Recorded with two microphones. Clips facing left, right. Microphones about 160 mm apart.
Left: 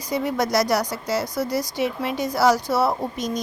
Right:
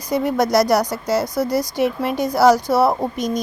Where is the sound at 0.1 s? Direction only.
45° right (ahead or behind).